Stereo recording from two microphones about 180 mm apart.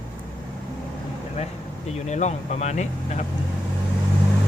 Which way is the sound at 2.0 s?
40° left (ahead or behind).